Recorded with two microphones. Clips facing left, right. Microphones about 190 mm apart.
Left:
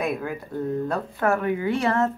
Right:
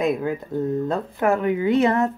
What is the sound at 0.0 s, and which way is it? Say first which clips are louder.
Speech: right 5 dB; 20° right (ahead or behind).